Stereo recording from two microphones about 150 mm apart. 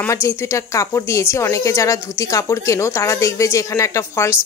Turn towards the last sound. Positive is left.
turn(degrees=20)  # may be behind; listen again after turning